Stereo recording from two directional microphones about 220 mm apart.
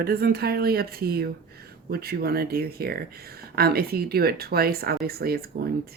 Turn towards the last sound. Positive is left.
turn(degrees=-45)  # may be behind; listen again after turning